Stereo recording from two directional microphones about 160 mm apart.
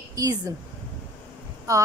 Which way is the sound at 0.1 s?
20° right (ahead or behind).